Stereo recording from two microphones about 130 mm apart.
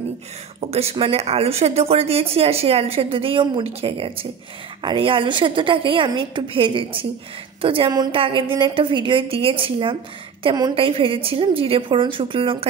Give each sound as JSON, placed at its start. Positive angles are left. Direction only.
{"t": 0.6, "sound": "a woman's voice", "side_deg": -50}
{"t": 10.4, "sound": "a woman's voice", "side_deg": -30}
{"t": 10.7, "sound": "speech", "side_deg": -45}